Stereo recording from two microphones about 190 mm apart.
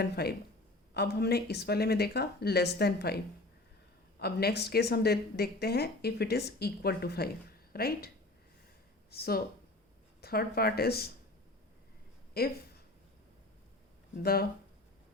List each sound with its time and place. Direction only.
0.0 s speech: 55° left (ahead or behind)
4.2 s speech: 55° left (ahead or behind)
12.3 s speech: 55° left (ahead or behind)
14.2 s speech: 55° left (ahead or behind)